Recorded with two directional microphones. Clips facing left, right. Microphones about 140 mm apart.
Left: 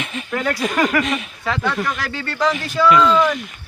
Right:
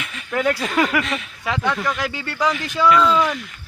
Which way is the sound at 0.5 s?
15° left (ahead or behind).